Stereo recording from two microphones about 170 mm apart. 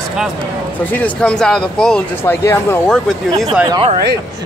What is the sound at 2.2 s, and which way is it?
Speech, 15° left (ahead or behind).